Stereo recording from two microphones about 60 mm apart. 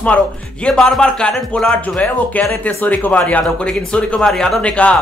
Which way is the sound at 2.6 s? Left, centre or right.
Left.